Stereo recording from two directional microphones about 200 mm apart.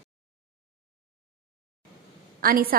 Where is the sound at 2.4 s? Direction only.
45° right (ahead or behind).